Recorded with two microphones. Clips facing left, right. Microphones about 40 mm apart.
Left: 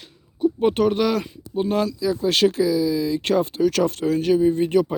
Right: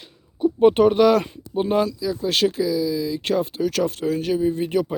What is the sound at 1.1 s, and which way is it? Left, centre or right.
Speech, right.